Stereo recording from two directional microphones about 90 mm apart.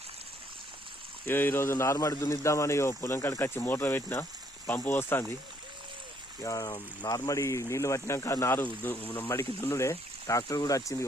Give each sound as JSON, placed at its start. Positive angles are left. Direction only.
{"t": 1.2, "sound": "speech", "side_deg": 25}
{"t": 6.4, "sound": "speech", "side_deg": 40}
{"t": 7.3, "sound": "speech", "side_deg": 35}